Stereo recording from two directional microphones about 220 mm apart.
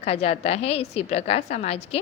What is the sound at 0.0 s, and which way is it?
A woman's voice, 30° left (ahead or behind).